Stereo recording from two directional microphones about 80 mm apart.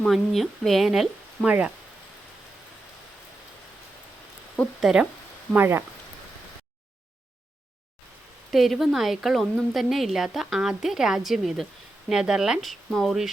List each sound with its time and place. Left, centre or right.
0.1 s a woman's voice: centre
1.5 s speech: centre
4.8 s a woman's voice: centre
5.5 s speech: right
8.5 s a woman's voice: centre